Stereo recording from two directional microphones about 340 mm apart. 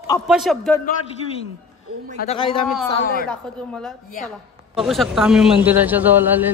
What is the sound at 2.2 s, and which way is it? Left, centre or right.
Speech, centre.